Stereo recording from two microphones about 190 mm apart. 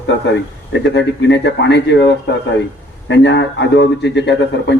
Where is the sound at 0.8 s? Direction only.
70° left (ahead or behind).